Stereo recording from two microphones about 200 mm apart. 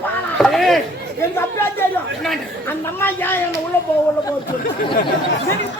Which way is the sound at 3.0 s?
10° left (ahead or behind).